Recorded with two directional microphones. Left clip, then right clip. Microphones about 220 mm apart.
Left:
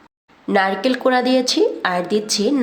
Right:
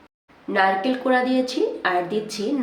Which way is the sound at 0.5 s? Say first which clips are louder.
Left 2 dB; 50° left (ahead or behind).